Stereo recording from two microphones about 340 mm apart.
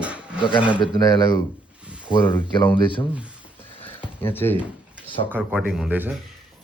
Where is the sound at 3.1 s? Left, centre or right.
Centre.